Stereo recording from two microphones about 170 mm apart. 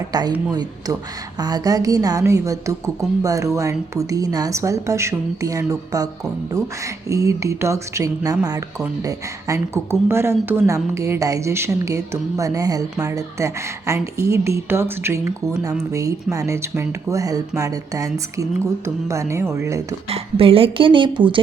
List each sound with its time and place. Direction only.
0.1 s a woman's voice: 25° right (ahead or behind)
20.1 s speech: 35° right (ahead or behind)